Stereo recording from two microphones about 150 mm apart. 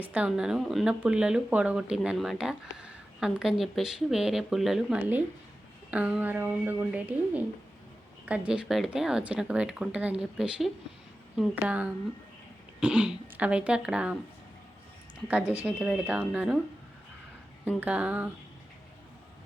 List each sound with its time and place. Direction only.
0.0 s speech: 10° right (ahead or behind)
15.3 s speech: 10° right (ahead or behind)
17.7 s speech: 10° right (ahead or behind)